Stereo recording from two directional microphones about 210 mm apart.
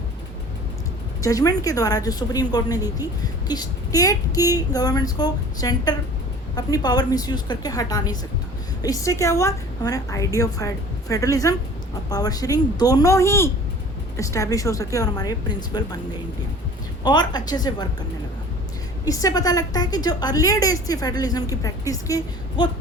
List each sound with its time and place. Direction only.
1.2 s a woman's voice: 15° left (ahead or behind)
19.0 s a woman's voice: 15° left (ahead or behind)